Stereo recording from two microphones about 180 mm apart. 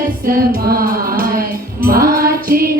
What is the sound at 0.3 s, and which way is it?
Music, 55° right (ahead or behind).